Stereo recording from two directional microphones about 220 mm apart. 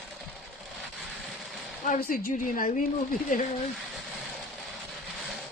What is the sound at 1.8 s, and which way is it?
Speech, 40° left (ahead or behind).